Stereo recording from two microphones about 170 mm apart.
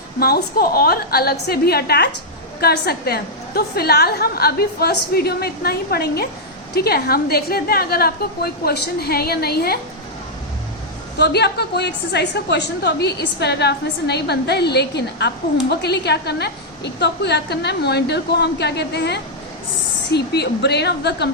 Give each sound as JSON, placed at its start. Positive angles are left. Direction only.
{"t": 0.2, "sound": "a woman's voice", "side_deg": 65}
{"t": 11.2, "sound": "a woman's voice", "side_deg": 75}